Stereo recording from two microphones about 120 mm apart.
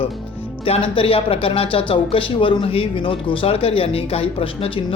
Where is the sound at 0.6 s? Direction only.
50° left (ahead or behind).